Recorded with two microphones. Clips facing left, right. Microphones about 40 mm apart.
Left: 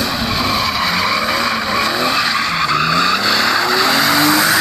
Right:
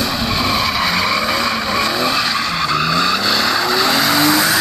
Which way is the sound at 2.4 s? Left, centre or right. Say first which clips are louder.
Left 2 dB; left.